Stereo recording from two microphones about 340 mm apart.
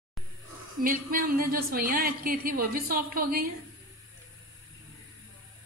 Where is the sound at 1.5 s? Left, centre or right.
Right.